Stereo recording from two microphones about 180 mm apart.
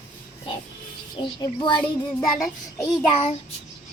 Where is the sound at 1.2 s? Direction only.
25° left (ahead or behind).